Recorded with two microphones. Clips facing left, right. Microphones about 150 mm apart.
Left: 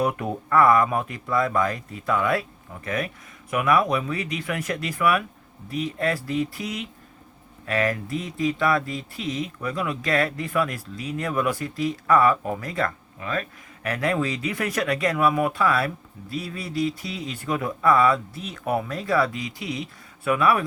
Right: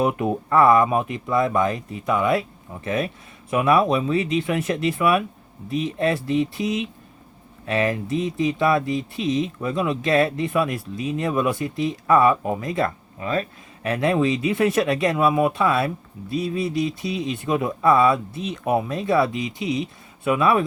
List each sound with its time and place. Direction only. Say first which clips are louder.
0.0 s speech: right 4 dB; 20° right (ahead or behind)